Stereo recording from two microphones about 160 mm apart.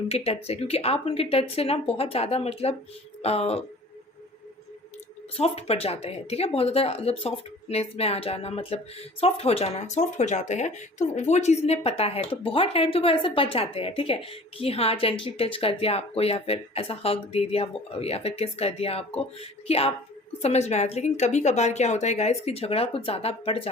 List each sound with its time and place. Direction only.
0.4 s speech: 40° left (ahead or behind)
3.2 s a sound: 40° left (ahead or behind)
5.4 s speech: 40° left (ahead or behind)